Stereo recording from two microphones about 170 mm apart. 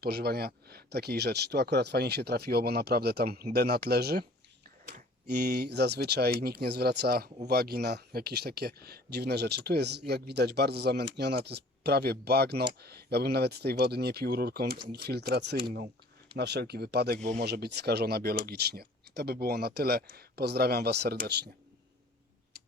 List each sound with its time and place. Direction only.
0.0 s speech: 65° right (ahead or behind)